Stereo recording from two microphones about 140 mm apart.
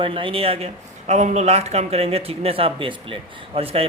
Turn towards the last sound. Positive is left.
turn(degrees=-45)  # may be behind; listen again after turning